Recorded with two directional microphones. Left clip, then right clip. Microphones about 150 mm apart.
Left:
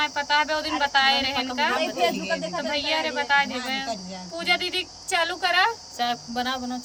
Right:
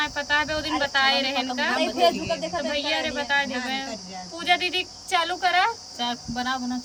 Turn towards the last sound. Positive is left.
turn(degrees=45)  # may be behind; listen again after turning